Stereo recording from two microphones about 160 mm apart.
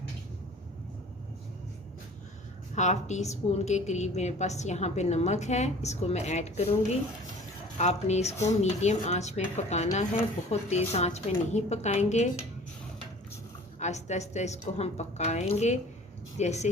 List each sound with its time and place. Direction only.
2.7 s speech: 45° left (ahead or behind)
7.8 s speech: 45° left (ahead or behind)
13.7 s speech: 45° left (ahead or behind)